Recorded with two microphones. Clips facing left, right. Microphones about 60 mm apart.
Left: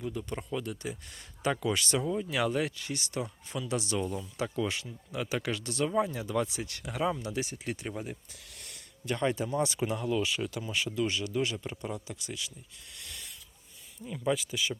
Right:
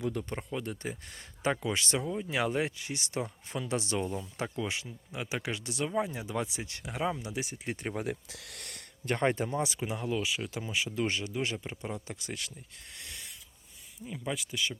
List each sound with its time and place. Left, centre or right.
0.0 s speech: right
0.3 s speech: right
2.0 s speech: centre
2.3 s speech: right
7.9 s speech: right
9.0 s speech: right
9.6 s speech: centre
9.9 s speech: centre
10.2 s speech: centre
10.9 s speech: right
11.2 s speech: centre
12.0 s speech: right
13.0 s a sound: right
14.0 s speech: centre